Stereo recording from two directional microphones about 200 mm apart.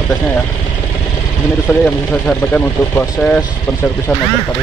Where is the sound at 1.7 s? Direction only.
10° left (ahead or behind).